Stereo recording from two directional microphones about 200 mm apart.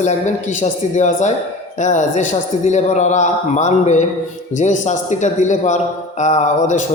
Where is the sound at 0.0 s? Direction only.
35° left (ahead or behind).